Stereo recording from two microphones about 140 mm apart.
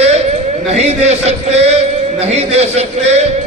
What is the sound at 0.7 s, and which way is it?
A man's voice, 55° right (ahead or behind).